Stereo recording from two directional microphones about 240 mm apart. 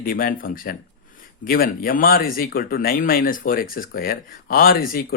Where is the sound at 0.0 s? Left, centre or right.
Left.